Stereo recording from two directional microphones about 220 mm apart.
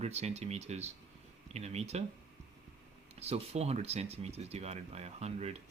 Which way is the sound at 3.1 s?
30° right (ahead or behind).